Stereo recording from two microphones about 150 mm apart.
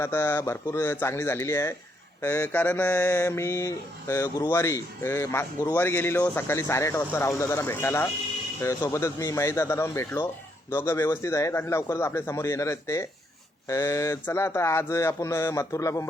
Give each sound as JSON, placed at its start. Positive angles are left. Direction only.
{"t": 0.0, "sound": "mantra", "side_deg": 15}
{"t": 8.6, "sound": "a man's voice", "side_deg": 20}